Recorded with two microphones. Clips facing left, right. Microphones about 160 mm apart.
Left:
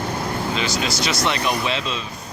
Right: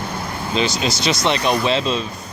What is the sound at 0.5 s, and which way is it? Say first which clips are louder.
Speech: right 3 dB; 25° right (ahead or behind).